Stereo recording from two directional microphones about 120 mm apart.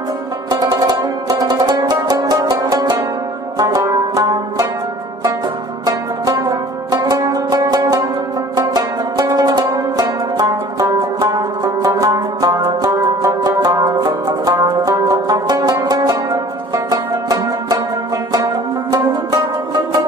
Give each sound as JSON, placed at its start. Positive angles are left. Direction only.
{"t": 0.8, "sound": "music", "side_deg": -30}
{"t": 5.9, "sound": "music", "side_deg": -30}